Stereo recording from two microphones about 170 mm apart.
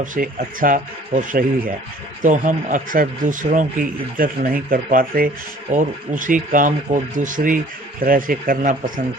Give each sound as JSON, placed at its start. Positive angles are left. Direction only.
{"t": 0.0, "sound": "speech", "side_deg": -50}